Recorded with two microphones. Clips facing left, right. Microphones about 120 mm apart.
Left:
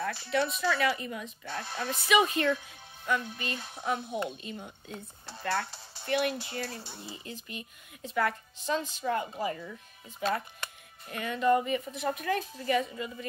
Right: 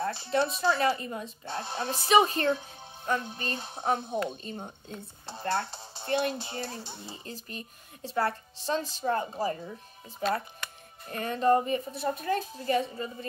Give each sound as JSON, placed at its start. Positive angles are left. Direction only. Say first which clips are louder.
{"t": 0.0, "sound": "speech", "louder": "right 2 dB", "side_deg": -30}
{"t": 5.2, "sound": "speech", "louder": "right 2 dB", "side_deg": -25}
{"t": 7.2, "sound": "speech", "louder": "right 1 dB", "side_deg": -35}